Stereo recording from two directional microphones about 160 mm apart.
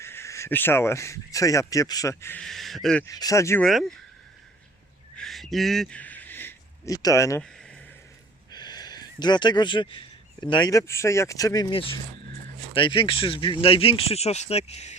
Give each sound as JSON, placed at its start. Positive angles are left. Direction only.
{"t": 0.0, "sound": "speech", "side_deg": 15}
{"t": 2.4, "sound": "speech", "side_deg": 0}
{"t": 3.1, "sound": "speech", "side_deg": 20}
{"t": 3.6, "sound": "speech", "side_deg": 0}
{"t": 5.1, "sound": "a sound", "side_deg": 0}
{"t": 7.4, "sound": "a sound", "side_deg": 5}
{"t": 8.4, "sound": "speech", "side_deg": 25}
{"t": 11.7, "sound": "speech", "side_deg": 35}